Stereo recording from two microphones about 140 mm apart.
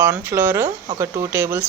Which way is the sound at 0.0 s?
15° right (ahead or behind).